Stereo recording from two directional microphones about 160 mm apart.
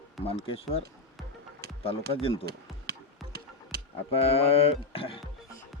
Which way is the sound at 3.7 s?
65° right (ahead or behind).